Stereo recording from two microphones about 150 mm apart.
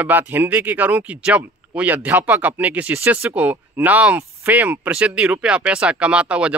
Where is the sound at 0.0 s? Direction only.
10° right (ahead or behind).